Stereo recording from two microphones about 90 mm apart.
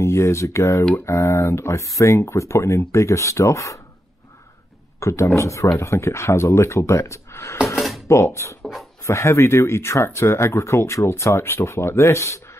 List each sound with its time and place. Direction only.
0.0 s speech: 30° left (ahead or behind)
5.0 s speech: 30° left (ahead or behind)